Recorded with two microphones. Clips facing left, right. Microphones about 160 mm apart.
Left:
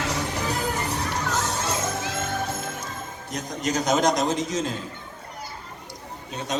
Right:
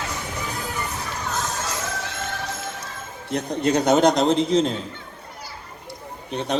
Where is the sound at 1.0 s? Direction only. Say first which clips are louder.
Left 2 dB; 70° left (ahead or behind).